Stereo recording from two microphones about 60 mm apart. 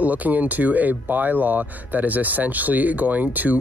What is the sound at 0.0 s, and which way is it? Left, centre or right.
Speech, right.